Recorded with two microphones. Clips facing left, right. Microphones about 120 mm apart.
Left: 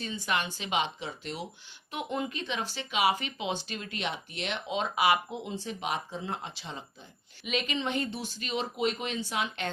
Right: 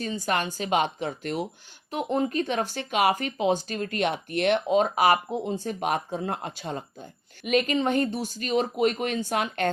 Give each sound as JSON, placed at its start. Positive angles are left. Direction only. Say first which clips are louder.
{"t": 0.0, "sound": "speech", "louder": "right 5 dB", "side_deg": -45}
{"t": 1.9, "sound": "speech", "louder": "right 7 dB", "side_deg": -40}